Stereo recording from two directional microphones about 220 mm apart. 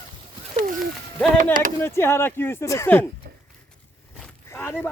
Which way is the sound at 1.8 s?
10° left (ahead or behind).